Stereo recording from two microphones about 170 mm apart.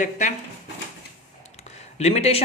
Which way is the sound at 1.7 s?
40° left (ahead or behind).